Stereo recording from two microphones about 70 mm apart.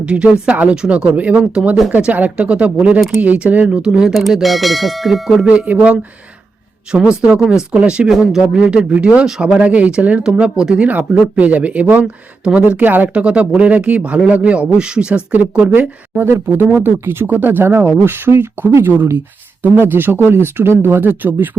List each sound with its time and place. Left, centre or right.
0.0 s speech: centre
5.5 s speech: centre
7.2 s speech: centre
8.0 s speech: centre
8.4 s speech: centre